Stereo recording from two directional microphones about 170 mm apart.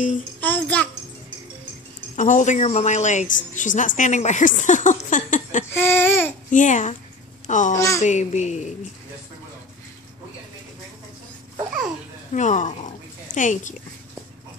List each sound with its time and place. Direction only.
0.4 s a child's voice: 10° left (ahead or behind)
2.1 s speech: 45° left (ahead or behind)
5.7 s speech: 15° left (ahead or behind)
6.5 s a child's voice: 45° left (ahead or behind)
7.7 s speech: 20° left (ahead or behind)
8.0 s speech: 45° left (ahead or behind)
12.3 s speech: 45° left (ahead or behind)